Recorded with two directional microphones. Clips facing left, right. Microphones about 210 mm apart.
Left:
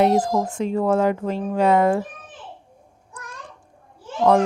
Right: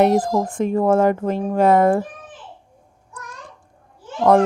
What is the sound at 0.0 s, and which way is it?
A woman's voice, 55° right (ahead or behind).